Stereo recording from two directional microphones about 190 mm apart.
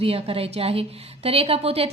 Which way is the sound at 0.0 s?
30° right (ahead or behind).